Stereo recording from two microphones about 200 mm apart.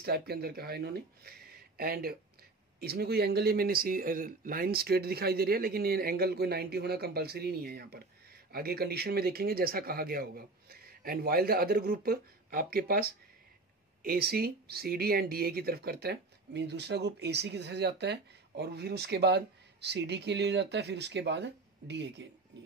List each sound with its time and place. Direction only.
0.0 s speech: 50° right (ahead or behind)